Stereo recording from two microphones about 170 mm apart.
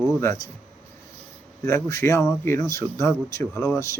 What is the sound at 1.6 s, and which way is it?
Speech, 20° left (ahead or behind).